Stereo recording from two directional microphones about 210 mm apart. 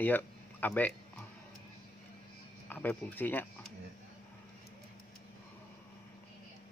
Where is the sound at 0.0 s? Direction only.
10° left (ahead or behind).